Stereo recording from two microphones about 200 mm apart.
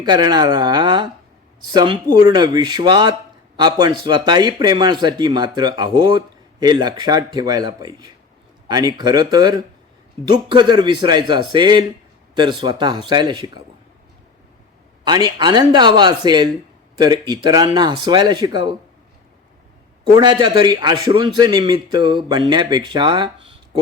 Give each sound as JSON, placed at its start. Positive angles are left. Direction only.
{"t": 0.0, "sound": "speech", "side_deg": -20}
{"t": 15.0, "sound": "speech", "side_deg": -20}
{"t": 20.1, "sound": "speech", "side_deg": -20}